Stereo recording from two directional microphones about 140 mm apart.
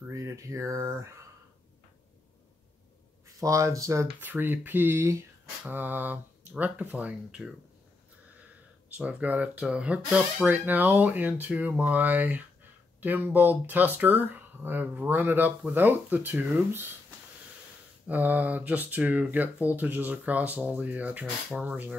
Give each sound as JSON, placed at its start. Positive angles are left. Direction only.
{"t": 0.1, "sound": "speech", "side_deg": -20}
{"t": 3.3, "sound": "speech", "side_deg": -25}
{"t": 8.8, "sound": "speech", "side_deg": -10}
{"t": 18.0, "sound": "speech", "side_deg": -10}